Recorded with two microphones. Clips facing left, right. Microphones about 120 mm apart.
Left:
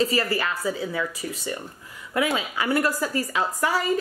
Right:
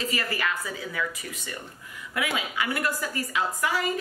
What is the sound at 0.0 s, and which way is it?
A woman's voice, 35° left (ahead or behind).